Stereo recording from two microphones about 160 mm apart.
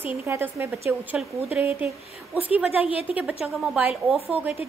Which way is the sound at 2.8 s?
35° left (ahead or behind).